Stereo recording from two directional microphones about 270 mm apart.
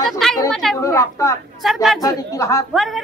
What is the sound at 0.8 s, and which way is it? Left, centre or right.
Speech, centre.